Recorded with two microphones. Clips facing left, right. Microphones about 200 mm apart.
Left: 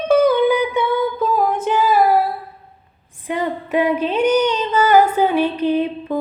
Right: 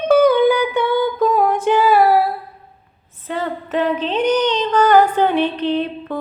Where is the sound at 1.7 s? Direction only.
70° right (ahead or behind).